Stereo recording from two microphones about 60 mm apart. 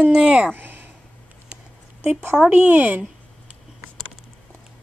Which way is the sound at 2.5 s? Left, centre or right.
Right.